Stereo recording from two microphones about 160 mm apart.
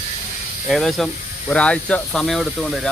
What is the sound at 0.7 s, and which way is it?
Speech, centre (ahead or behind).